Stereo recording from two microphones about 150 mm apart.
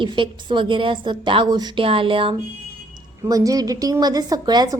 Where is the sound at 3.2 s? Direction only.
25° right (ahead or behind).